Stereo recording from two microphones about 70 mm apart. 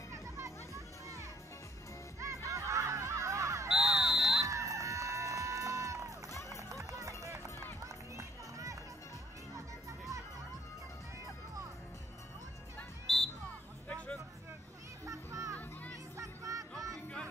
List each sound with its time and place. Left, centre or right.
0.1 s music: right
3.6 s smoke detector: centre
4.5 s livestock: right
6.5 s run: right
9.8 s music: right
13.0 s music: centre
15.0 s children playing: right
16.2 s music: right